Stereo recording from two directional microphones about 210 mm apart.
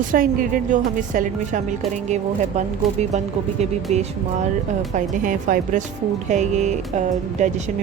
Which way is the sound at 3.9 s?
30° right (ahead or behind).